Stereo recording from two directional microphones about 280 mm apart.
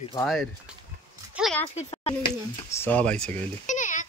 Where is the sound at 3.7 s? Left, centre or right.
Left.